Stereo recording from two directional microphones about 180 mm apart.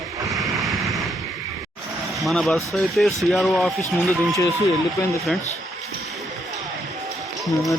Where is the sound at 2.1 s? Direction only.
Centre (ahead or behind).